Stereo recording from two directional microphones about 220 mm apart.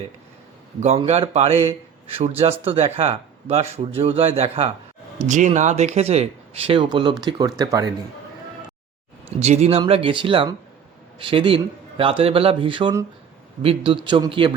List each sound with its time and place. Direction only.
0.8 s speech: 30° right (ahead or behind)
9.4 s speech: 30° right (ahead or behind)